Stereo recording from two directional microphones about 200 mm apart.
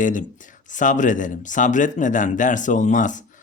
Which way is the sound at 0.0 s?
40° left (ahead or behind).